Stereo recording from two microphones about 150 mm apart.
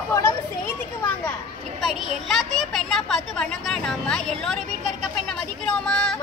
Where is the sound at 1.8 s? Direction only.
Centre (ahead or behind).